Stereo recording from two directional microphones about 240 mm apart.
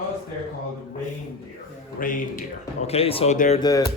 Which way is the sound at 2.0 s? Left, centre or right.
Left.